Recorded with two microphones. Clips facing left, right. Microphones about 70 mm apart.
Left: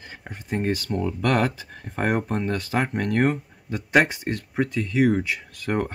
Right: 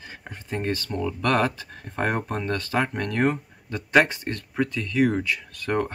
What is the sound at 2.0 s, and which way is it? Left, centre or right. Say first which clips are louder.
Speech: left 2 dB; centre.